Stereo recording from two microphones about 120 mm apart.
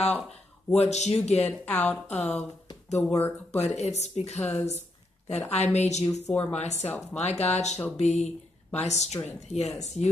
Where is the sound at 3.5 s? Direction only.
65° left (ahead or behind).